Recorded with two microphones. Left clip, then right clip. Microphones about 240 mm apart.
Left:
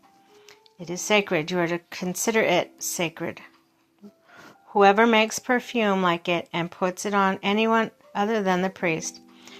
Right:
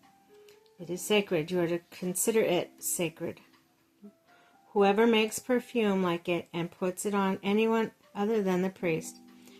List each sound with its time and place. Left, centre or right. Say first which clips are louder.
0.4 s speech: left 4 dB; centre
4.7 s speech: left 7 dB; centre